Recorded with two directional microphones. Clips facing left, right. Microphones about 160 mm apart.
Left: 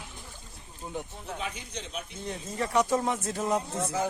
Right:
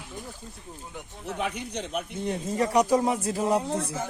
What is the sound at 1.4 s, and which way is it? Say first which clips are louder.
Speech: right 9 dB; 65° right (ahead or behind).